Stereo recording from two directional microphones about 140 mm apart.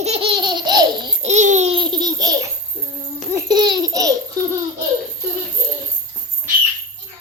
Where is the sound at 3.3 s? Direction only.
30° right (ahead or behind).